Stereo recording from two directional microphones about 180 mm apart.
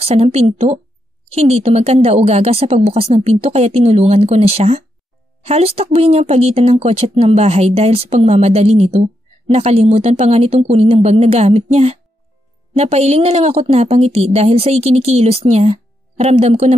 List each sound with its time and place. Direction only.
0.0 s speech: 35° right (ahead or behind)